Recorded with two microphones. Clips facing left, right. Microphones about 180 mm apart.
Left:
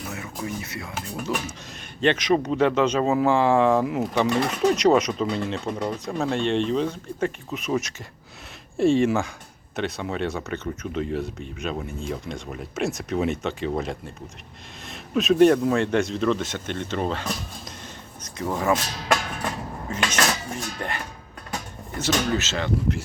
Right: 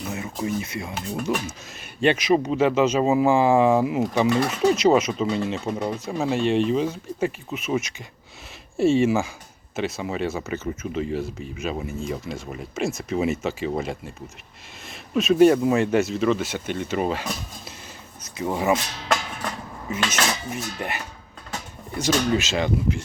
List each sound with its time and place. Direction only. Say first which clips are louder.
0.1 s speech: right 6 dB; 20° right (ahead or behind)
0.9 s speech: right 3 dB; centre (ahead or behind)
2.0 s speech: right 1 dB; 10° right (ahead or behind)
4.4 s speech: right 1 dB; 5° right (ahead or behind)
20.1 s speech: left 2 dB; 10° right (ahead or behind)